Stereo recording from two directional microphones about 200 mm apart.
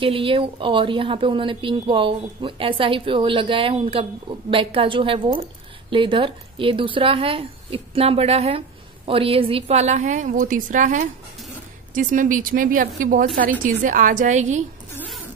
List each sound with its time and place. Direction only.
0.0 s a woman's voice: 25° right (ahead or behind)